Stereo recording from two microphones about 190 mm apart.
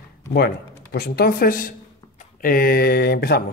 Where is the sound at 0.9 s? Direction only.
55° left (ahead or behind).